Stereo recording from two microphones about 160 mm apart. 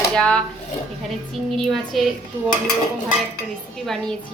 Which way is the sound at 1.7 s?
Centre (ahead or behind).